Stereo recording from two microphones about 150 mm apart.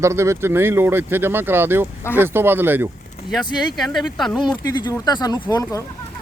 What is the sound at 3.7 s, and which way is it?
Speech, centre (ahead or behind).